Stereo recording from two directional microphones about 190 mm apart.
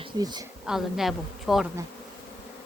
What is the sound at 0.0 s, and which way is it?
Speech, 20° right (ahead or behind).